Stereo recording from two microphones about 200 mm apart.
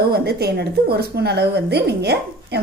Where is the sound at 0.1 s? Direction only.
50° right (ahead or behind).